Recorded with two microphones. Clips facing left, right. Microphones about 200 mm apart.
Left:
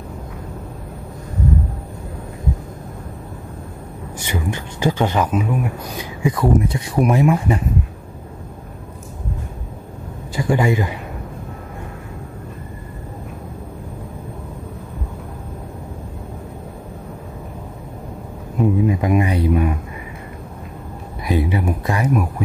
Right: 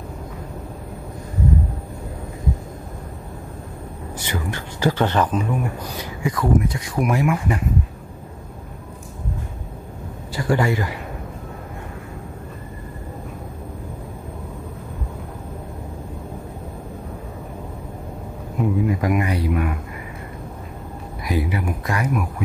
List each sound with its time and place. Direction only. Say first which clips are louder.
4.2 s speech: left 3 dB; 20° left (ahead or behind)
6.2 s speech: left 3 dB; 25° left (ahead or behind)
10.3 s speech: left 2 dB; 15° left (ahead or behind)
18.9 s speech: left 3 dB; 20° left (ahead or behind)
21.3 s speech: left 4 dB; 25° left (ahead or behind)